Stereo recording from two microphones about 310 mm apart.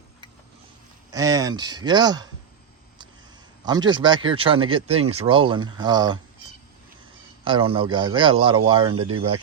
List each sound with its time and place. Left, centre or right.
1.1 s speech: centre
3.7 s speech: centre
7.4 s speech: centre